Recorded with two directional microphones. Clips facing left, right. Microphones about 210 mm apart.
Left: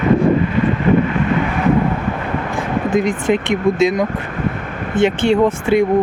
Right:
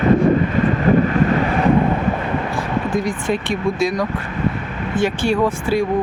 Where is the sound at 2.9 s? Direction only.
20° left (ahead or behind).